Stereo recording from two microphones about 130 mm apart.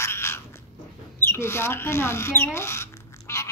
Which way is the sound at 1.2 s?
20° left (ahead or behind).